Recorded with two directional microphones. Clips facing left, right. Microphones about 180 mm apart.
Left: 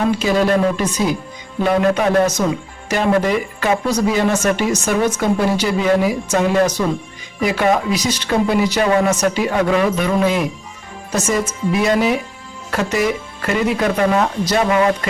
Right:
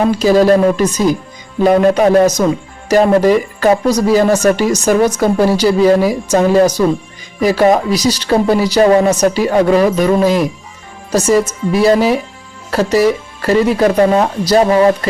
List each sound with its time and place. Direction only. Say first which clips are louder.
0.2 s speech: right 6 dB; 40° right (ahead or behind)